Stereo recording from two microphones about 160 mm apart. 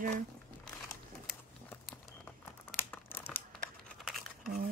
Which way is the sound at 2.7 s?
15° left (ahead or behind).